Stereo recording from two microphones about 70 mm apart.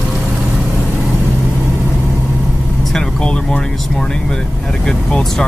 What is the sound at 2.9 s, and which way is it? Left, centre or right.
Speech, centre.